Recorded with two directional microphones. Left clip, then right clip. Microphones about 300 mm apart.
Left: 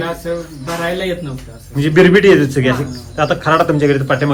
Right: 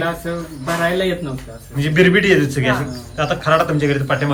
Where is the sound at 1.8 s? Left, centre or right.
Centre.